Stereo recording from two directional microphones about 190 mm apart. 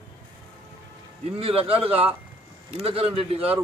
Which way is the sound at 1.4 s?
30° right (ahead or behind).